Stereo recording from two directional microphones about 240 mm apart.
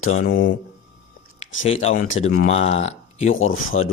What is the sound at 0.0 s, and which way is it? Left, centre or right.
Speech, left.